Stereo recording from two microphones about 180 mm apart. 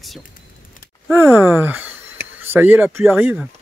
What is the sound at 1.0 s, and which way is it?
Speech, 10° right (ahead or behind).